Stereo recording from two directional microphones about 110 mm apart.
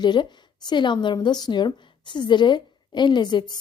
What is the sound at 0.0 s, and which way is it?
Speech, 40° left (ahead or behind).